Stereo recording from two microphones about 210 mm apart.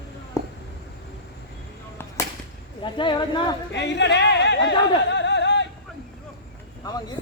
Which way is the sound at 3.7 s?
55° left (ahead or behind).